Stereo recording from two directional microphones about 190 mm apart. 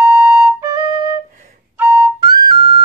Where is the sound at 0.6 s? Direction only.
15° right (ahead or behind).